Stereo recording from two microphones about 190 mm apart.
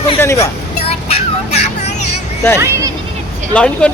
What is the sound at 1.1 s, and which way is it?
Music, 35° left (ahead or behind).